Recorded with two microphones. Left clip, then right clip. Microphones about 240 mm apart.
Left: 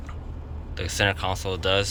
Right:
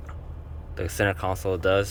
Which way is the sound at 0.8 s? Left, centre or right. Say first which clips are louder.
Left 1 dB; centre.